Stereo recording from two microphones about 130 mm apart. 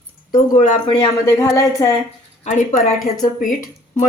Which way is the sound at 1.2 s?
25° left (ahead or behind).